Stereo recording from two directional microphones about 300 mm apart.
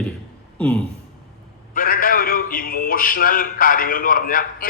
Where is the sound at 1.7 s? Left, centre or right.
Left.